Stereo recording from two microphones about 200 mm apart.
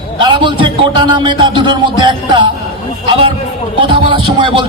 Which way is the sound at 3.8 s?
25° right (ahead or behind).